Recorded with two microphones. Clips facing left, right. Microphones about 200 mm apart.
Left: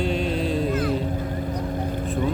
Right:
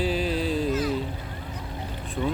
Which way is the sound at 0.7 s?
55° left (ahead or behind).